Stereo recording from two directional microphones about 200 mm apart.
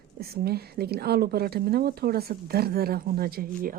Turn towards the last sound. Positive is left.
turn(degrees=-45)  # may be behind; listen again after turning